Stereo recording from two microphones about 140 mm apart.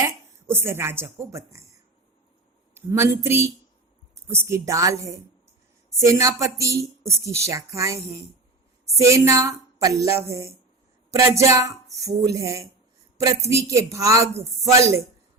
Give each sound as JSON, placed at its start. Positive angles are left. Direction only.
{"t": 0.0, "sound": "a woman's voice", "side_deg": -20}
{"t": 2.7, "sound": "a woman's voice", "side_deg": -20}